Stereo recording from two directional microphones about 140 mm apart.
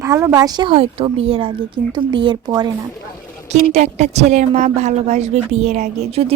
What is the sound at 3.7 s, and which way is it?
A woman's voice, 55° right (ahead or behind).